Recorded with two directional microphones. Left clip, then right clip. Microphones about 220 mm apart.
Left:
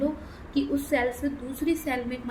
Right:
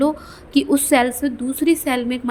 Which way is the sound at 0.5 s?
50° right (ahead or behind).